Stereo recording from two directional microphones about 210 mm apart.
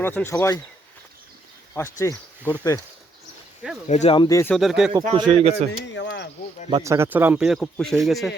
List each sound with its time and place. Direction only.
0.0 s speech: 10° left (ahead or behind)
1.7 s speech: 15° left (ahead or behind)
3.8 s speech: 35° left (ahead or behind); by 4.5 s 15° left (ahead or behind)
4.5 s speech: centre (ahead or behind)
5.1 s speech: 25° right (ahead or behind)
5.7 s speech: 60° left (ahead or behind)
6.7 s speech: 15° right (ahead or behind); by 8.3 s centre (ahead or behind)